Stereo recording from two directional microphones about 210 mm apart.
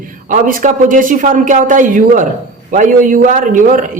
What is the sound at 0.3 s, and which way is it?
A man's voice, 40° right (ahead or behind).